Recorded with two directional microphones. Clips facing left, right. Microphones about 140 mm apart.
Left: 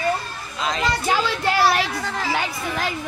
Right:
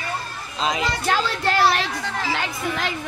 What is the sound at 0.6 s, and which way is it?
Speech, 20° right (ahead or behind).